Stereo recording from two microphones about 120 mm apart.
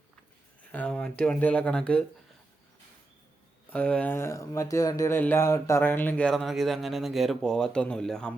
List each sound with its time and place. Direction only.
0.7 s speech: 10° left (ahead or behind)
3.7 s speech: 10° left (ahead or behind)
6.3 s speech: centre (ahead or behind)